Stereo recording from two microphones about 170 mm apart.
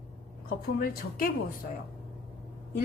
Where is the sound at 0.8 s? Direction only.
60° left (ahead or behind).